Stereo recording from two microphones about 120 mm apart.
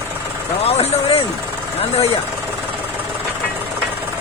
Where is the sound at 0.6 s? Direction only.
60° left (ahead or behind).